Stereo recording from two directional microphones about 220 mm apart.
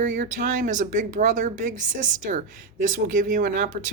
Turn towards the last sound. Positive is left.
turn(degrees=-35)  # may be behind; listen again after turning